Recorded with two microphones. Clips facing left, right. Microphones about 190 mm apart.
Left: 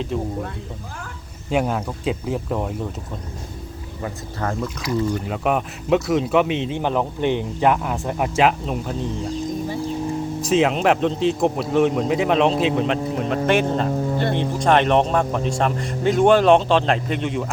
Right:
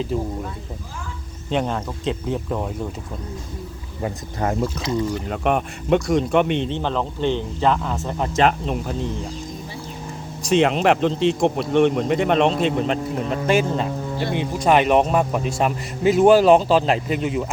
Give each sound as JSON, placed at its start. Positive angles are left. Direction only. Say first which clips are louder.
{"t": 0.1, "sound": "speech", "louder": "even", "side_deg": 0}
{"t": 1.5, "sound": "speech", "louder": "left 2 dB", "side_deg": 5}
{"t": 4.0, "sound": "speech", "louder": "right 3 dB", "side_deg": -20}
{"t": 5.3, "sound": "speech", "louder": "even", "side_deg": 0}
{"t": 6.7, "sound": "speech", "louder": "left 2 dB", "side_deg": 15}
{"t": 10.4, "sound": "speech", "louder": "right 1 dB", "side_deg": 0}